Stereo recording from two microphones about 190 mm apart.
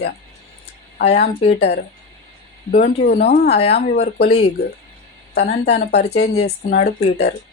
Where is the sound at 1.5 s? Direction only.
60° left (ahead or behind).